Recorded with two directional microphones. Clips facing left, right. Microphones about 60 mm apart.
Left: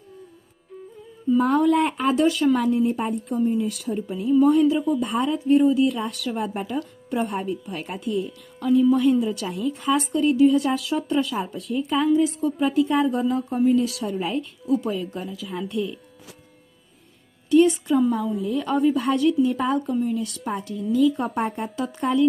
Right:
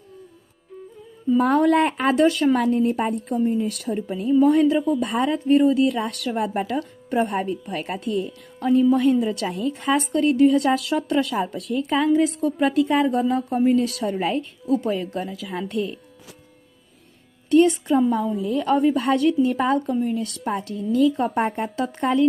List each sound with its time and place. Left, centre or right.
1.4 s speech: right
4.9 s speech: right
14.7 s speech: right
17.5 s speech: right
19.9 s a woman's voice: right
21.8 s a woman's voice: right